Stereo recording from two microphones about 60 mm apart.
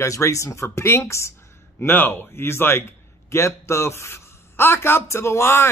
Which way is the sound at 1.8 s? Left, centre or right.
Left.